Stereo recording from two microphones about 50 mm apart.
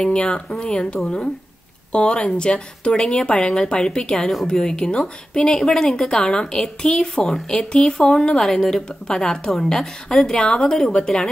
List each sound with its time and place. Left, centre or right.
0.0 s speech: centre